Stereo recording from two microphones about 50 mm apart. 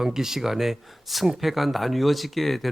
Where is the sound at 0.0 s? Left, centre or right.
Centre.